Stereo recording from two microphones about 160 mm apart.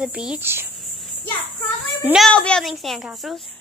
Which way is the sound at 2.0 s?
5° right (ahead or behind).